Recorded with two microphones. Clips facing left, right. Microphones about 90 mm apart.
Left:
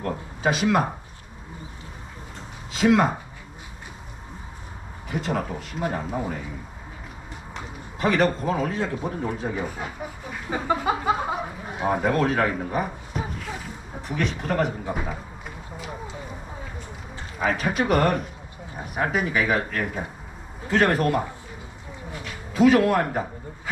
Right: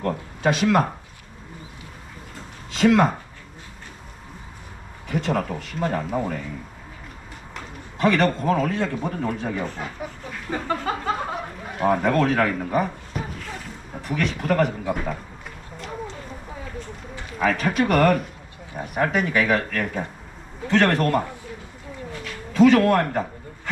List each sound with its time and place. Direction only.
0.0 s speech: centre (ahead or behind)
2.7 s a man's voice: centre (ahead or behind)
5.0 s a man's voice: 5° left (ahead or behind)
5.8 s speech: 15° left (ahead or behind)
7.9 s a man's voice: 5° left (ahead or behind)
14.9 s a sound: 10° left (ahead or behind)
17.4 s a man's voice: 5° left (ahead or behind)
22.1 s a sound: 10° left (ahead or behind)